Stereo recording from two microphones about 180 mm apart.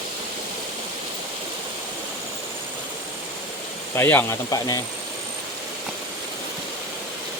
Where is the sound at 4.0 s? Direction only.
15° left (ahead or behind).